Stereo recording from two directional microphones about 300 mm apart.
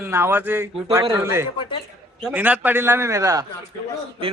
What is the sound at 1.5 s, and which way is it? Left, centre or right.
Speech, centre.